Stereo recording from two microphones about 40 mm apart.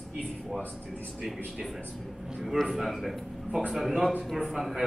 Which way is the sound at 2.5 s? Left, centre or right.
Centre.